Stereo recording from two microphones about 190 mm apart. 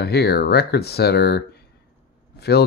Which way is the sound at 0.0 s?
55° left (ahead or behind).